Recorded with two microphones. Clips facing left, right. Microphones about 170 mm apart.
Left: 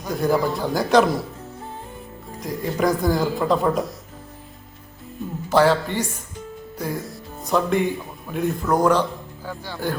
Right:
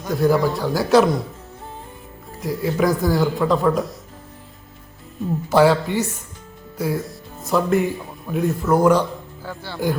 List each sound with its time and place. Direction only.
0.1 s speech: centre (ahead or behind)
2.4 s speech: 5° right (ahead or behind)
5.5 s a man's voice: 10° right (ahead or behind)
9.4 s speech: 15° left (ahead or behind)